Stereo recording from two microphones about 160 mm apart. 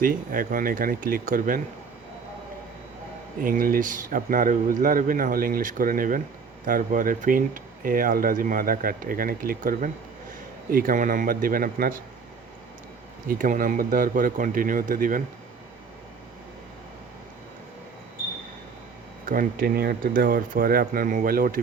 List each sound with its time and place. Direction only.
0.0 s speech: 60° right (ahead or behind)
3.4 s speech: 60° right (ahead or behind)
13.2 s speech: 55° right (ahead or behind)
19.2 s speech: 60° right (ahead or behind)